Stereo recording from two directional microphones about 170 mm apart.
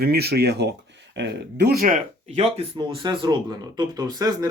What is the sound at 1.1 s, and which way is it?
Speech, 85° right.